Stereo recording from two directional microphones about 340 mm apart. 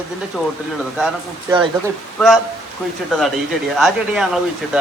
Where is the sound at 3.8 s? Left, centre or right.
Centre.